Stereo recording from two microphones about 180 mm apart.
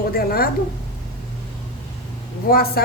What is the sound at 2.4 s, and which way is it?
Speech, 60° left (ahead or behind).